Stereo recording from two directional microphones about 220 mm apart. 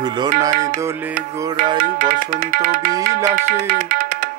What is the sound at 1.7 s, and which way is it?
Music, 40° right (ahead or behind).